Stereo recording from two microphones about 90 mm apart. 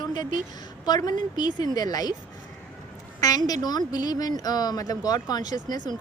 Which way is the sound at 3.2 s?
45° left (ahead or behind).